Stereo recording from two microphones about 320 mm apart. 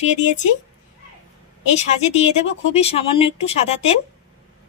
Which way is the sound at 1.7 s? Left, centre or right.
Centre.